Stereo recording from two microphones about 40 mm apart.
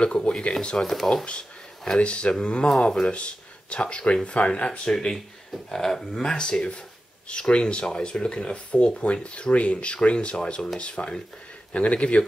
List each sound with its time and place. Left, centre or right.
0.0 s speech: left
0.8 s speech: centre
2.0 s speech: left
5.7 s speech: centre; by 12.3 s left